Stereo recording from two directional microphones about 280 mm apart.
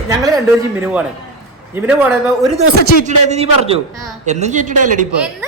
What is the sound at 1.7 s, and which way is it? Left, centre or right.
Speech, centre.